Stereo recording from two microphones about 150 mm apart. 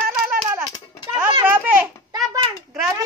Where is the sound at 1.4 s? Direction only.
10° right (ahead or behind).